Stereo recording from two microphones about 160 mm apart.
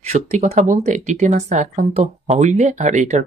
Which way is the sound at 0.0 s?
45° right (ahead or behind).